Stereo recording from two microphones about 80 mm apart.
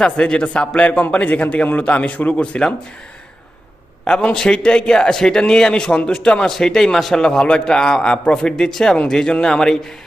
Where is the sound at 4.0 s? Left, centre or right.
Centre.